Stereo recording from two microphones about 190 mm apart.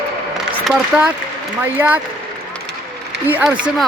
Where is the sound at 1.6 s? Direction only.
10° right (ahead or behind).